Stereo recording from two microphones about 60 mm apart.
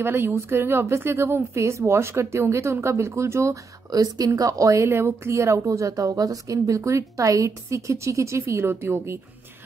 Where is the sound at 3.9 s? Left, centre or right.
Right.